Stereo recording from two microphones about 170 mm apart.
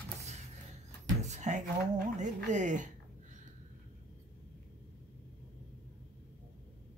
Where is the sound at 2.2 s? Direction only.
45° right (ahead or behind).